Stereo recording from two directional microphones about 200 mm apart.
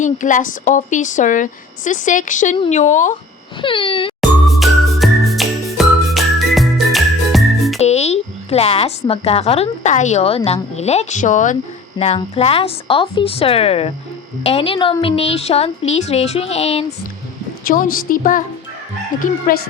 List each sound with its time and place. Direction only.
0.0 s a woman's voice: 40° left (ahead or behind)
3.6 s a woman's voice: 25° left (ahead or behind)
4.2 s music: centre (ahead or behind)
7.8 s a woman's voice: 35° left (ahead or behind)
17.7 s a woman's voice: 45° left (ahead or behind)
19.5 s a woman's voice: 45° left (ahead or behind)